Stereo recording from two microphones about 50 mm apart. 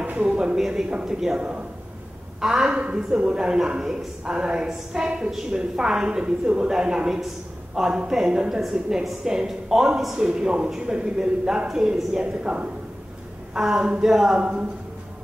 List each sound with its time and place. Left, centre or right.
0.0 s a sound: right
0.6 s a woman's voice: centre
2.7 s a man's voice: right